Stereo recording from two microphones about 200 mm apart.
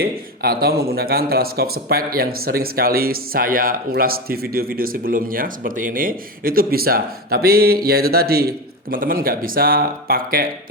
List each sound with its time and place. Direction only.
0.0 s speech: 50° right (ahead or behind)